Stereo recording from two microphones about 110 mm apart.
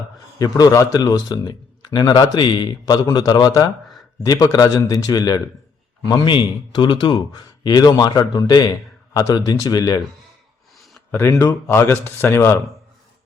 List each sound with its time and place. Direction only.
0.3 s a man's voice: 35° left (ahead or behind)
11.1 s speech: 25° left (ahead or behind)